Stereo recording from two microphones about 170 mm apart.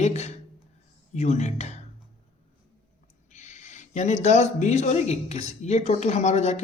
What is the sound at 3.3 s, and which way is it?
Speech, 45° left (ahead or behind).